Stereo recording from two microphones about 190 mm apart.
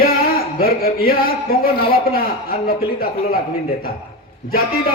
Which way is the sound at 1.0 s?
50° left (ahead or behind).